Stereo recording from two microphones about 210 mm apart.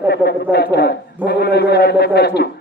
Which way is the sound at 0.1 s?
50° left (ahead or behind).